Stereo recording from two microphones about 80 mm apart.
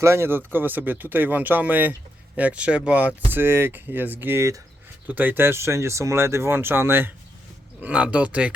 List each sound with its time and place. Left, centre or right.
0.0 s speech: right
5.0 s speech: right
7.8 s speech: centre